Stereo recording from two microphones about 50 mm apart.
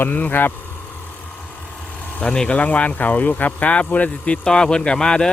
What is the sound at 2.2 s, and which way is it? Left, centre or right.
Speech, left.